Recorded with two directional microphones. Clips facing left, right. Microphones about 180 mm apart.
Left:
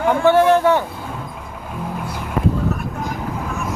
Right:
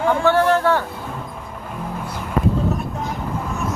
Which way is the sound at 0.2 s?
15° left (ahead or behind).